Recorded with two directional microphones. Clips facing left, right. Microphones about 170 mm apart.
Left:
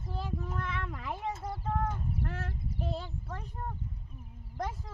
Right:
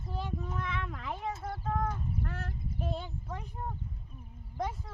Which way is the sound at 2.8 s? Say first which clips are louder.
Even; centre (ahead or behind).